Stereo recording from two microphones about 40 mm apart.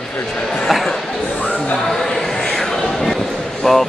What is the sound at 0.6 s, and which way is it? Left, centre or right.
Speech, centre.